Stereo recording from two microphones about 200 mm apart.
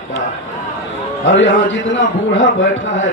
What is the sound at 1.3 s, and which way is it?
A man's voice, 65° left (ahead or behind).